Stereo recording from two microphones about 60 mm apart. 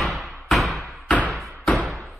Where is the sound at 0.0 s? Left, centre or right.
Centre.